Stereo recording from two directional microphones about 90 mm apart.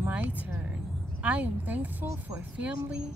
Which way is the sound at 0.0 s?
20° right (ahead or behind).